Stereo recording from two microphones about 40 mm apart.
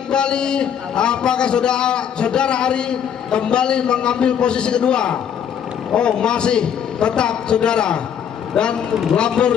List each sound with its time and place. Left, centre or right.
0.1 s a man's voice: left